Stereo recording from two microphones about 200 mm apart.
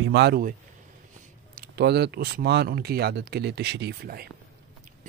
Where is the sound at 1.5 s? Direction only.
50° right (ahead or behind).